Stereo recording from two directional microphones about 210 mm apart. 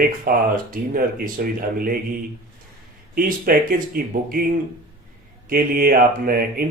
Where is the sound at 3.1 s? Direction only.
45° right (ahead or behind).